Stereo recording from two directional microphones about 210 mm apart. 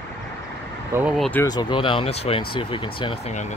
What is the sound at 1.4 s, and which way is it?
Speech, 20° left (ahead or behind).